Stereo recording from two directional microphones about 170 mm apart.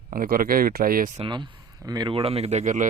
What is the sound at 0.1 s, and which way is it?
Speech, 55° right (ahead or behind).